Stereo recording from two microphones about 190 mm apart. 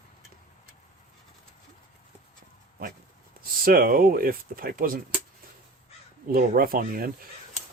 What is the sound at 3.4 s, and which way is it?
Speech, 50° right (ahead or behind).